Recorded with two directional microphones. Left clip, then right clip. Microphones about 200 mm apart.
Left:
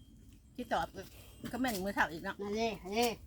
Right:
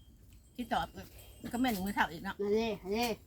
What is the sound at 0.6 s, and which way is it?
Speech, 10° left (ahead or behind).